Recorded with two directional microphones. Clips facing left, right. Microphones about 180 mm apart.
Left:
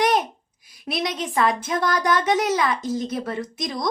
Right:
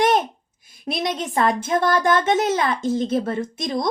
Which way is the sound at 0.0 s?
25° right (ahead or behind).